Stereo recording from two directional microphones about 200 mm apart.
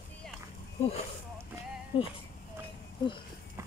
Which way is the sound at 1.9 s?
25° left (ahead or behind).